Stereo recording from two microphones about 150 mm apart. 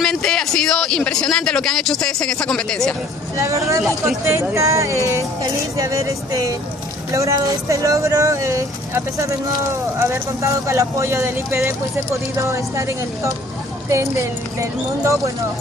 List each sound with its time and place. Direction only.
0.0 s a man's voice: 5° left (ahead or behind)
3.3 s speech: 20° right (ahead or behind)